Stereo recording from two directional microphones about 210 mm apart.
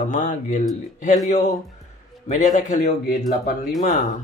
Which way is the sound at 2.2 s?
35° left (ahead or behind).